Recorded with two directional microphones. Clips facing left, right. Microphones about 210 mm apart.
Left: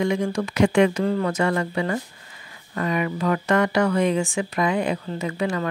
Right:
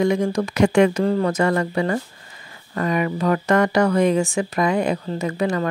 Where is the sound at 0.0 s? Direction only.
40° right (ahead or behind).